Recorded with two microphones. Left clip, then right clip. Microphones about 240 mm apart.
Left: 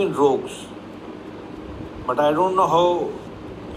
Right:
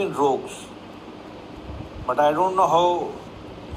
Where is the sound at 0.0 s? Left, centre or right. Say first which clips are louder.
Left 3 dB; left.